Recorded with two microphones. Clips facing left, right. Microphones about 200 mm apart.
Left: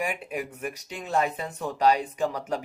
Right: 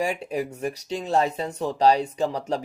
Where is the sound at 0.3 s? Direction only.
35° right (ahead or behind).